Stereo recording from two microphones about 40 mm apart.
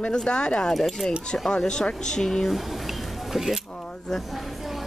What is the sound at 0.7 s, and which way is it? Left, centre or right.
Speech, centre.